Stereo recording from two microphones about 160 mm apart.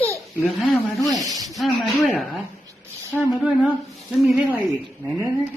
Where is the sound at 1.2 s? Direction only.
20° right (ahead or behind).